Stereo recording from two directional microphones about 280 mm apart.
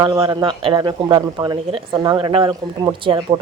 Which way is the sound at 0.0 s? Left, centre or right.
Centre.